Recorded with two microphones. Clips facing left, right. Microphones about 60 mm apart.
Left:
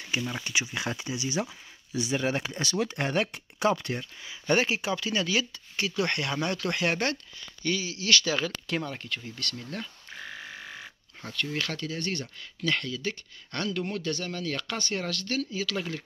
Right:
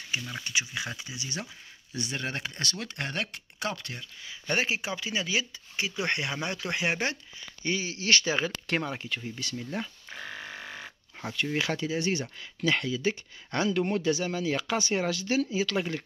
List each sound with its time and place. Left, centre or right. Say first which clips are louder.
0.1 s speech: left 2 dB; centre
2.0 s speech: left 6 dB; centre
4.5 s speech: left 4 dB; centre
7.6 s speech: even; right
8.5 s speech: right 1 dB; right
8.8 s speech: right 2 dB; centre